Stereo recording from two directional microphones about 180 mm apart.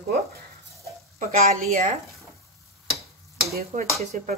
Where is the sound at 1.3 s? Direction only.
40° right (ahead or behind).